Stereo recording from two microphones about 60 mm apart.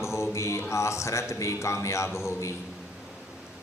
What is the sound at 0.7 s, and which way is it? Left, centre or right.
A man's voice, left.